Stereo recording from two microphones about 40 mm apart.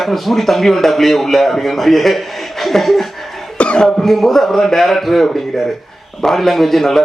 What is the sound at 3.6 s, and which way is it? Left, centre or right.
Speech, left.